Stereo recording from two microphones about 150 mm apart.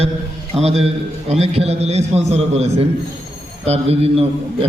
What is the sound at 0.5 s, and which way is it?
A man's voice, 45° right (ahead or behind).